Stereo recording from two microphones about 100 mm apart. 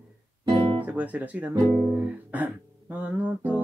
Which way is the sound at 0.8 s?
15° right (ahead or behind).